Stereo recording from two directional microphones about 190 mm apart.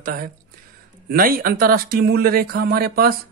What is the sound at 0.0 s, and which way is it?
Speech, 45° right (ahead or behind).